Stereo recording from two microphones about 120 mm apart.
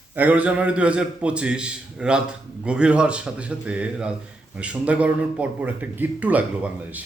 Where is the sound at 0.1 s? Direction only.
15° right (ahead or behind).